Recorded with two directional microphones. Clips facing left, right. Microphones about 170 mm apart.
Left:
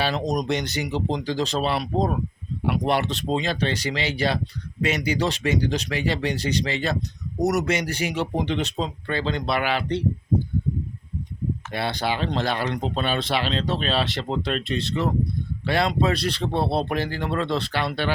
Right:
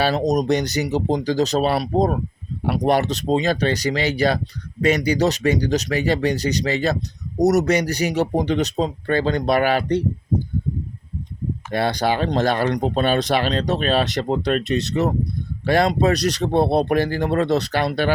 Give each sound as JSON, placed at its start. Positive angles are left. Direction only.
{"t": 0.0, "sound": "speech", "side_deg": -40}
{"t": 11.7, "sound": "speech", "side_deg": -45}